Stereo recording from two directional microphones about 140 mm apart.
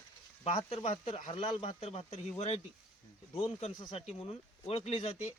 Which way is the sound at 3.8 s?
40° left (ahead or behind).